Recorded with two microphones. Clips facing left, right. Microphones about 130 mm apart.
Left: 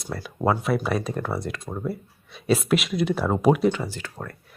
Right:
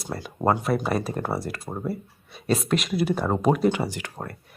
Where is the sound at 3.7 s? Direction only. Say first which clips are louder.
Right 1 dB; 15° right (ahead or behind).